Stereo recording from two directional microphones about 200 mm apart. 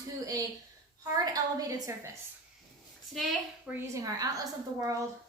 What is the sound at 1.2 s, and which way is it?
Speech, 20° right (ahead or behind).